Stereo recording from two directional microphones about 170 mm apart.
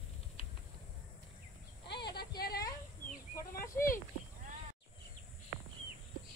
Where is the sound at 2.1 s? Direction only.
65° left (ahead or behind).